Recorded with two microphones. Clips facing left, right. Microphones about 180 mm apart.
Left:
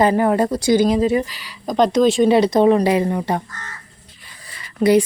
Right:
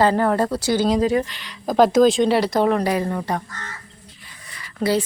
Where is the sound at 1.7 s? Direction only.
5° right (ahead or behind).